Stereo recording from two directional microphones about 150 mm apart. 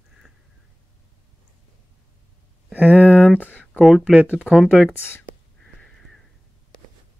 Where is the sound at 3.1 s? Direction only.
10° left (ahead or behind).